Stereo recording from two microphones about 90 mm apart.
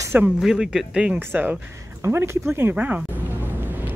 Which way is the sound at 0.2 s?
10° right (ahead or behind).